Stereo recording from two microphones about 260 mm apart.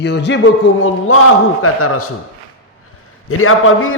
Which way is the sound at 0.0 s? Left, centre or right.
Left.